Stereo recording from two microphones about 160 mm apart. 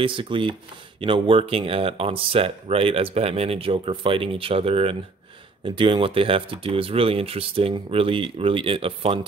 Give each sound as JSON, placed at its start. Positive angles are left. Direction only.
{"t": 0.0, "sound": "speech", "side_deg": -30}